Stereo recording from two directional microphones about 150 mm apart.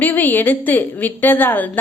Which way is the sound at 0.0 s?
10° left (ahead or behind).